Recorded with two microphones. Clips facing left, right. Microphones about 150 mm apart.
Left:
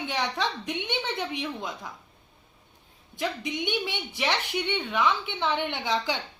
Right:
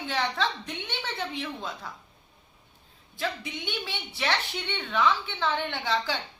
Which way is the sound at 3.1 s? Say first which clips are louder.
Left 3 dB; 15° left (ahead or behind).